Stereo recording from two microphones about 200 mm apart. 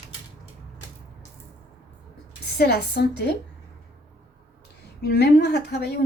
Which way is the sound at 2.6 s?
55° left (ahead or behind).